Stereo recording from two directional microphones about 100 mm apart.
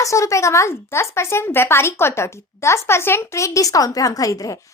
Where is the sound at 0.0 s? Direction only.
30° left (ahead or behind).